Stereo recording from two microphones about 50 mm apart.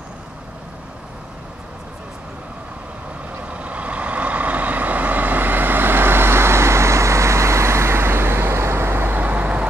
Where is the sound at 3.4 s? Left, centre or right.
Right.